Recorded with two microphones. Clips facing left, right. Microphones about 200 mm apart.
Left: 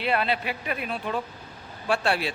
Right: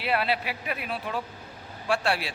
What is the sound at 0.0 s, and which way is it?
A man's voice, 5° right (ahead or behind).